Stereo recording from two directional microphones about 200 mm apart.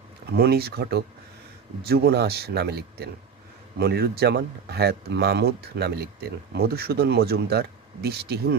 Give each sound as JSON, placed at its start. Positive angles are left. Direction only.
{"t": 0.3, "sound": "speech", "side_deg": -50}